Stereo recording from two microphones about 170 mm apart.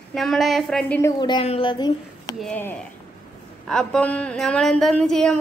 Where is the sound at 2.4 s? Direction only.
10° left (ahead or behind).